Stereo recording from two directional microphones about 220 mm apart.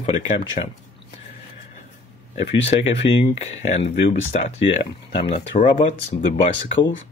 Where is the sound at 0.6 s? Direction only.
30° left (ahead or behind).